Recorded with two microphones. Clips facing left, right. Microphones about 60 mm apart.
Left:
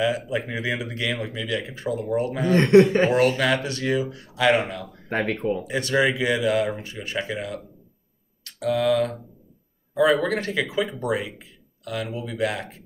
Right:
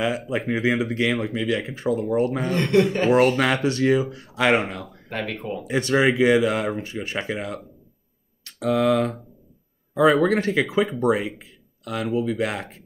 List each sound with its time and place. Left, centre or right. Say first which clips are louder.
0.0 s speech: even; right
2.7 s speech: left 5 dB; left
3.1 s speech: right 2 dB; right
5.1 s speech: left 4 dB; left
5.7 s speech: right 4 dB; right
8.5 s speech: right 1 dB; right
10.1 s speech: right 4 dB; centre